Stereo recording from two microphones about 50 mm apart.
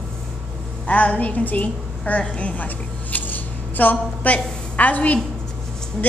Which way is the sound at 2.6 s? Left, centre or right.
Left.